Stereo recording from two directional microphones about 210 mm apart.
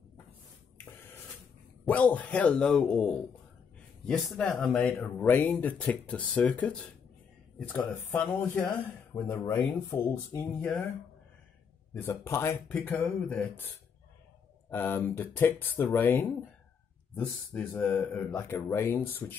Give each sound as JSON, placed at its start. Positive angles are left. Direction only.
{"t": 1.9, "sound": "a man's voice", "side_deg": 5}
{"t": 11.9, "sound": "speech", "side_deg": 10}